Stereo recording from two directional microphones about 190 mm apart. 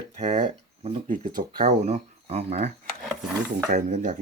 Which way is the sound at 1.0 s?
40° right (ahead or behind).